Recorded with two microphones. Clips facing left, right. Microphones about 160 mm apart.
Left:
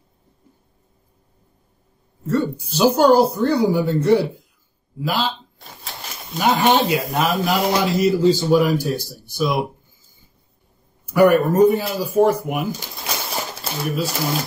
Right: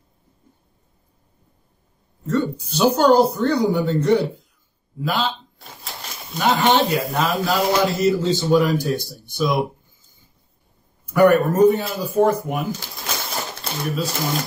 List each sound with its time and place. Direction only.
2.2 s speech: 10° left (ahead or behind)
6.3 s speech: 10° left (ahead or behind)
11.1 s speech: centre (ahead or behind)